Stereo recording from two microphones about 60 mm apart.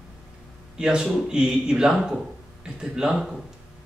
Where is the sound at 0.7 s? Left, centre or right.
Centre.